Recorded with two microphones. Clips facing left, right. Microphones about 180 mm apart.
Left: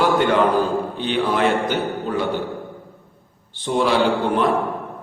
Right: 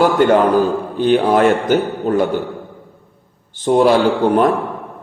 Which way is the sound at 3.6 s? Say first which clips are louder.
Right 7 dB; 45° right (ahead or behind).